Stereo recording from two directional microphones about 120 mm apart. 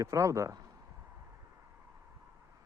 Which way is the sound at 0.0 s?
25° right (ahead or behind).